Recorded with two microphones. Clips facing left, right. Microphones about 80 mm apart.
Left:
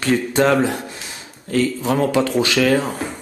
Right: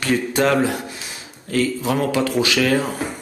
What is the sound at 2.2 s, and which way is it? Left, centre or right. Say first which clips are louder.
Speech: left 1 dB; centre.